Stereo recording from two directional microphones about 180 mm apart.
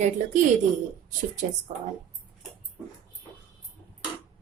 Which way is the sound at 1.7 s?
40° right (ahead or behind).